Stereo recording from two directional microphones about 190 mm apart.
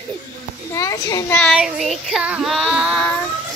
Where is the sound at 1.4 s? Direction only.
Centre (ahead or behind).